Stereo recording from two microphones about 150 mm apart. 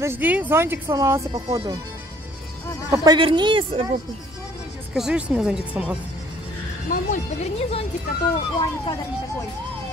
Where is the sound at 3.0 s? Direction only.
30° right (ahead or behind).